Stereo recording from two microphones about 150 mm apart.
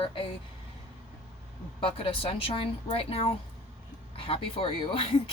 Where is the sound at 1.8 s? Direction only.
35° left (ahead or behind).